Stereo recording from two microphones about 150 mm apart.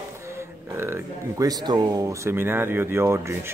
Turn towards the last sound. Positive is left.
turn(degrees=-15)  # may be behind; listen again after turning